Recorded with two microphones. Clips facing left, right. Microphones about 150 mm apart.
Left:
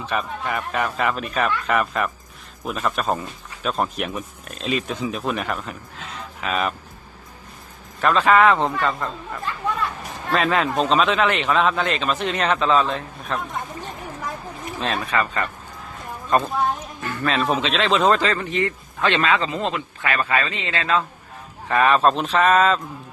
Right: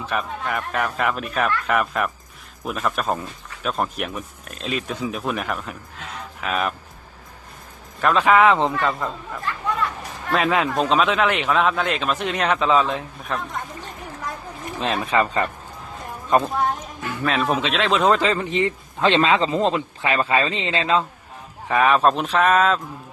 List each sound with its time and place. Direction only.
0.0 s speech: centre (ahead or behind)
6.1 s a sound: centre (ahead or behind)
8.0 s speech: 5° right (ahead or behind)
13.2 s speech: centre (ahead or behind)
14.8 s speech: 20° right (ahead or behind)
16.4 s speech: centre (ahead or behind)
18.2 s speech: 20° right (ahead or behind)
21.7 s speech: 5° right (ahead or behind)